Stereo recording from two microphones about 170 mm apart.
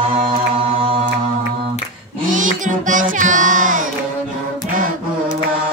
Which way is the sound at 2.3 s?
50° right (ahead or behind).